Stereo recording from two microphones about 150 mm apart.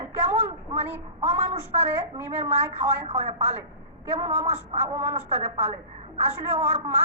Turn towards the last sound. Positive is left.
turn(degrees=-45)  # may be behind; listen again after turning